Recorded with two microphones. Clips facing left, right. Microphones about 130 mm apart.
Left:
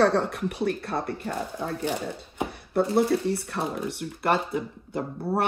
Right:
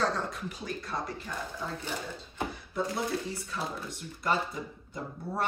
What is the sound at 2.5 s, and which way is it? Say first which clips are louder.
Chopping: left 11 dB; 65° left (ahead or behind).